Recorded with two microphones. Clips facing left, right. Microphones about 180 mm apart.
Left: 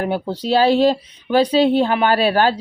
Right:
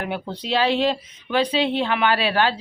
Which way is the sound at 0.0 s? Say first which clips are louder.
Left 7 dB; 35° left (ahead or behind).